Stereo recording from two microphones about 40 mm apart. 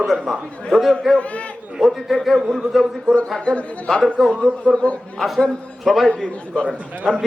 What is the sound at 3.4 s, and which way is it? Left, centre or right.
Speech, left.